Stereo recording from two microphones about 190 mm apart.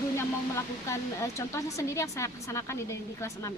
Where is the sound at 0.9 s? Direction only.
15° left (ahead or behind).